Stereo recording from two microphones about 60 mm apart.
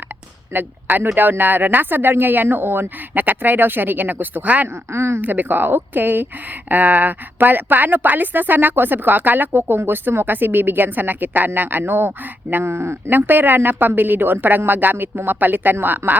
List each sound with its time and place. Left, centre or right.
0.5 s speech: right
4.9 s speech: right
5.2 s speech: right